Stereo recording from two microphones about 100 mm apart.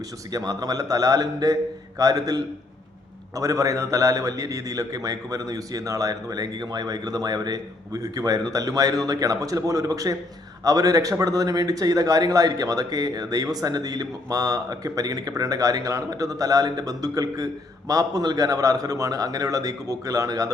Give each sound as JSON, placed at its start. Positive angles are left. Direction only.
{"t": 0.3, "sound": "a man's voice", "side_deg": -40}